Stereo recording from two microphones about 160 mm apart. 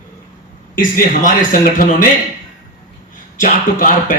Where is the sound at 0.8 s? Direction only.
55° left (ahead or behind).